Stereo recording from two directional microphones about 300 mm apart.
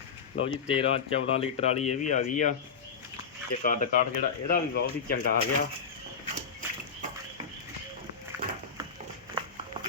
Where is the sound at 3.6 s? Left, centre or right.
Left.